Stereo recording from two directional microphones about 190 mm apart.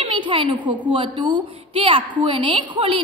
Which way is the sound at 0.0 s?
25° right (ahead or behind).